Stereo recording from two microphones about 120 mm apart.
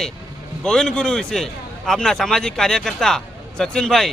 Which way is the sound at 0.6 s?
5° left (ahead or behind).